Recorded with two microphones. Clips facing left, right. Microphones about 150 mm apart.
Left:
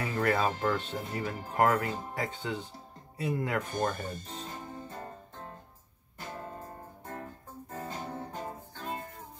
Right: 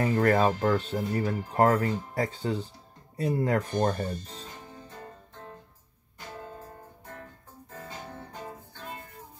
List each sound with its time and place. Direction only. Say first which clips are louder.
0.0 s speech: right 6 dB; 40° right (ahead or behind)
4.3 s music: left 3 dB; 40° left (ahead or behind)
7.7 s music: left 3 dB; 50° left (ahead or behind)